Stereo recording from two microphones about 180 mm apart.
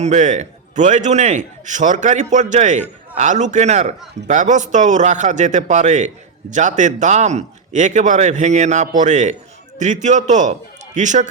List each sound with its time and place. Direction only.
0.0 s a man's voice: 40° right (ahead or behind)